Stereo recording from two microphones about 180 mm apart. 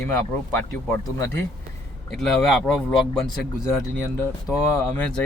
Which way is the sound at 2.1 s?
Centre (ahead or behind).